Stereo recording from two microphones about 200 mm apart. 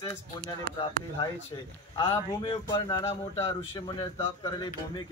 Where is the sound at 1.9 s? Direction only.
20° left (ahead or behind).